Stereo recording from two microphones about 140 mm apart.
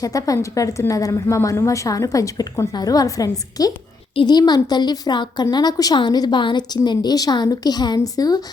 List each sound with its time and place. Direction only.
0.0 s a woman's voice: 25° left (ahead or behind)